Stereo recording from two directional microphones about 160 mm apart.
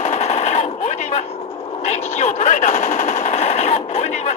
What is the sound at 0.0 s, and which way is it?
Machine gun, 40° left (ahead or behind).